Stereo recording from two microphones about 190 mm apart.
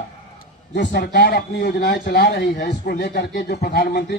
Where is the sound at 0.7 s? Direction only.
60° left (ahead or behind).